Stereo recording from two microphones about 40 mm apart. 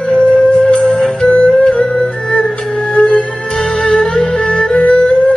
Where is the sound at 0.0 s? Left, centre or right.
Left.